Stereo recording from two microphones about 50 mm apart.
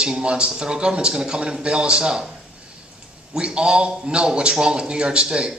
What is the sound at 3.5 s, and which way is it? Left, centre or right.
A man's voice, centre.